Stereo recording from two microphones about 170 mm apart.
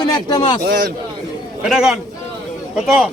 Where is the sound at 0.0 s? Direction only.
25° left (ahead or behind).